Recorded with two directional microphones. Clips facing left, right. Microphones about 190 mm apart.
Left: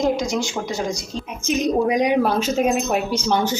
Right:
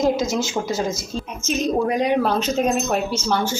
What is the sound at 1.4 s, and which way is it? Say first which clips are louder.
A woman's voice: left 2 dB; 15° left (ahead or behind).